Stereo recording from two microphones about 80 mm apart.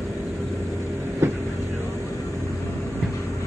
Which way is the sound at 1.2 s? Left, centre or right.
Right.